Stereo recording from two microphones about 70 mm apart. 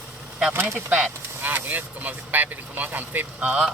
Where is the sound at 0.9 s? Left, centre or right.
Right.